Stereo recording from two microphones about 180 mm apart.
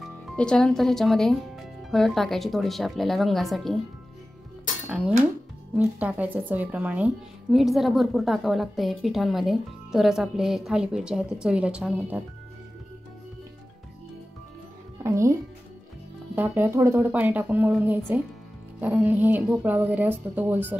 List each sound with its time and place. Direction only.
0.4 s a woman's voice: 5° left (ahead or behind)
4.8 s a woman's voice: 5° right (ahead or behind)
15.0 s speech: 15° right (ahead or behind)
16.3 s a woman's voice: 10° right (ahead or behind)